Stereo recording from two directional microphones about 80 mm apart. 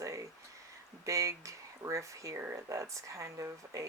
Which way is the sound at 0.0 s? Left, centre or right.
Right.